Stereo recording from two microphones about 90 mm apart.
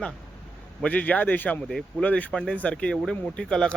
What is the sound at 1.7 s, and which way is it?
Speech, 5° left (ahead or behind).